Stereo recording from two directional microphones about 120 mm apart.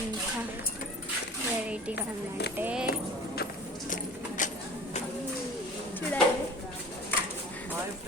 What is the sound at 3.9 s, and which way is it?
Keys jangling, 90° left.